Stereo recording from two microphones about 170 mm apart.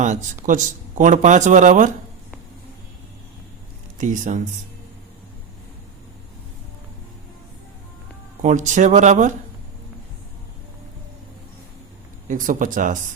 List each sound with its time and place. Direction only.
0.4 s speech: 50° right (ahead or behind)
3.9 s speech: 50° right (ahead or behind)
8.4 s speech: 45° right (ahead or behind)
12.3 s speech: 50° right (ahead or behind)